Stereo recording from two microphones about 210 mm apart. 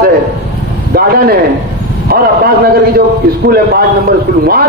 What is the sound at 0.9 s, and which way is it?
A man's voice, 45° right (ahead or behind).